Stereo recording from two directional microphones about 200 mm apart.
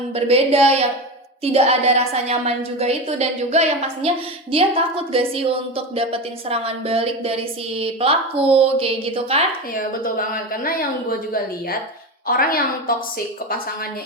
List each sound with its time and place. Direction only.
0.1 s a woman's voice: 30° right (ahead or behind)
9.7 s speech: 45° left (ahead or behind)
12.3 s speech: 45° left (ahead or behind)